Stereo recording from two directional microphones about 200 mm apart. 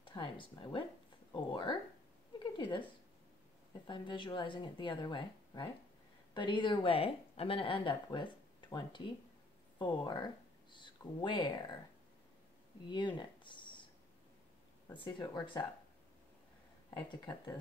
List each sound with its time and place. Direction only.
0.0 s speech: 25° left (ahead or behind)
2.3 s a sound: 20° left (ahead or behind)
3.8 s speech: 25° left (ahead or behind)
12.9 s a sound: 20° left (ahead or behind)
15.1 s speech: 20° left (ahead or behind)
17.1 s speech: 20° left (ahead or behind)